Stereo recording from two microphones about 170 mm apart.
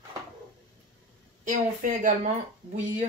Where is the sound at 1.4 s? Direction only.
50° right (ahead or behind).